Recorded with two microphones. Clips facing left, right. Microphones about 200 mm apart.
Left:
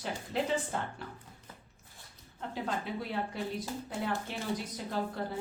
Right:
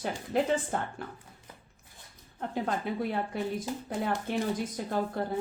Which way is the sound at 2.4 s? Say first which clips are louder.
Right 4 dB; 55° right (ahead or behind).